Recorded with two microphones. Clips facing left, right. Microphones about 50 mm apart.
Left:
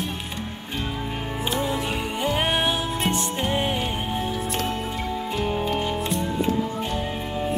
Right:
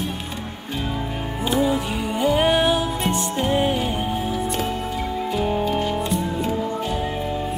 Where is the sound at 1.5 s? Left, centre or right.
Centre.